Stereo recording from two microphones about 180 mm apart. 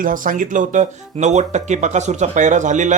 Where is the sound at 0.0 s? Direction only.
50° right (ahead or behind).